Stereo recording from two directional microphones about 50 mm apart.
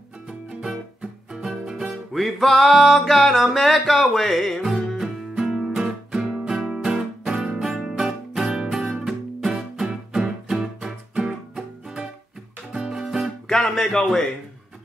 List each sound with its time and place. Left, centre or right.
0.3 s music: centre
2.1 s music: centre
4.9 s music: centre
7.2 s guitar: centre
7.6 s music: centre
9.8 s music: centre
13.5 s music: centre